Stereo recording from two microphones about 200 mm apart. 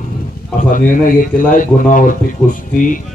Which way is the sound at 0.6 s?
40° left (ahead or behind).